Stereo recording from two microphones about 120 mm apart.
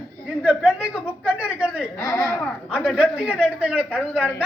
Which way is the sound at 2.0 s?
25° left (ahead or behind).